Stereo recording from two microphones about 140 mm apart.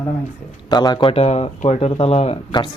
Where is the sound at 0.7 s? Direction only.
30° left (ahead or behind).